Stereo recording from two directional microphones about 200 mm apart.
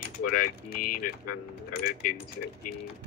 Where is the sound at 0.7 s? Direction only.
45° left (ahead or behind).